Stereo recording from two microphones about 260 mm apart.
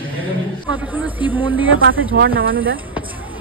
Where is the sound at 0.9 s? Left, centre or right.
Centre.